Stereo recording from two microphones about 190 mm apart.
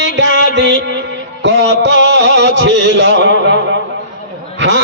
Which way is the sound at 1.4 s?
65° right (ahead or behind).